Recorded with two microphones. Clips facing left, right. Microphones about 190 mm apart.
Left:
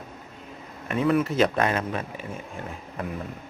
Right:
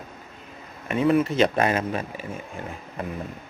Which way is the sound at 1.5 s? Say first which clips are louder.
Right 2 dB; 10° right (ahead or behind).